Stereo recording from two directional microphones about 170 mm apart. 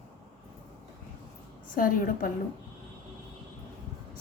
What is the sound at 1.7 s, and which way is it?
Speech, 55° left (ahead or behind).